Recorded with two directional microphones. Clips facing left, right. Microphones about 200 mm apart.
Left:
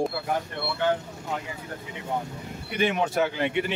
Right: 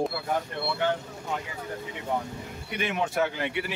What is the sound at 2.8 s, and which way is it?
Speech, 30° left (ahead or behind).